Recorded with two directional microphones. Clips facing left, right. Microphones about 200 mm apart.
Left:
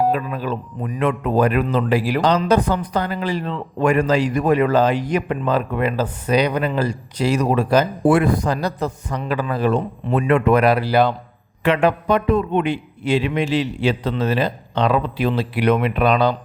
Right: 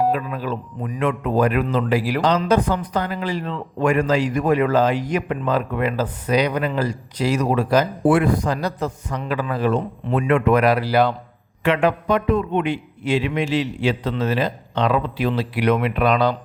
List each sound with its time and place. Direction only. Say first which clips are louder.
0.1 s a man's voice: left 1 dB; 30° left (ahead or behind)
11.6 s a man's voice: left 1 dB; 35° left (ahead or behind)